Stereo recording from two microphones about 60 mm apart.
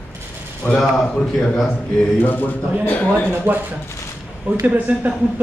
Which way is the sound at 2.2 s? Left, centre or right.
Left.